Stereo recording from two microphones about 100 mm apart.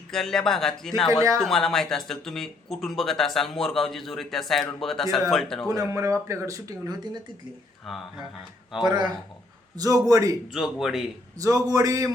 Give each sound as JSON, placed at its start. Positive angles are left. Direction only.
{"t": 0.1, "sound": "speech", "side_deg": 5}
{"t": 5.6, "sound": "speech", "side_deg": -35}
{"t": 7.9, "sound": "speech", "side_deg": 0}
{"t": 9.7, "sound": "speech", "side_deg": -35}
{"t": 10.5, "sound": "speech", "side_deg": -5}
{"t": 11.3, "sound": "speech", "side_deg": -35}